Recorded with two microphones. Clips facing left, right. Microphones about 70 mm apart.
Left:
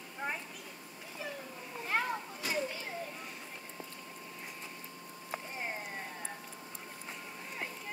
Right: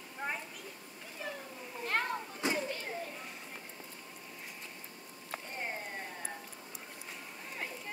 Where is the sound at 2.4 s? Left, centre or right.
Right.